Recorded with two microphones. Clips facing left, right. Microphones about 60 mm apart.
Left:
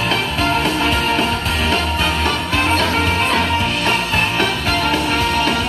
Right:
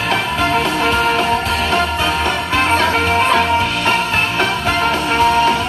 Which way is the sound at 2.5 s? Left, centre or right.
Right.